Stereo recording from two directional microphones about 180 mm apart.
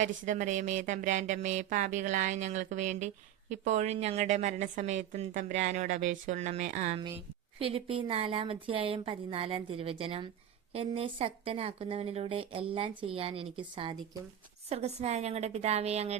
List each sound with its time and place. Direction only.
0.0 s music: 45° right (ahead or behind)
3.5 s a woman's voice: 40° right (ahead or behind)